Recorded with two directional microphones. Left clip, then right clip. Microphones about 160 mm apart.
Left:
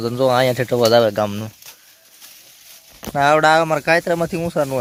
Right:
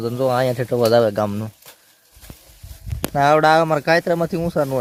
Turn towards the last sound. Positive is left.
turn(degrees=5)  # may be behind; listen again after turning